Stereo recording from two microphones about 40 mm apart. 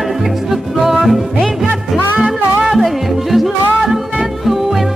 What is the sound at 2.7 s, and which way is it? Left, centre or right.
Music, centre.